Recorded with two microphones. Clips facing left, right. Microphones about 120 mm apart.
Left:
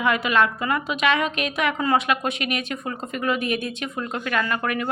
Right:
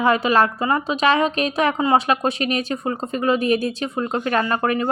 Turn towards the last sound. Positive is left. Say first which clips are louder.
# right 5 dB
turn(degrees=-35)  # may be behind; listen again after turning